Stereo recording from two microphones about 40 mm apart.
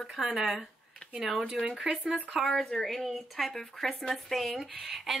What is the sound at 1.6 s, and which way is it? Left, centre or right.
Speech, centre.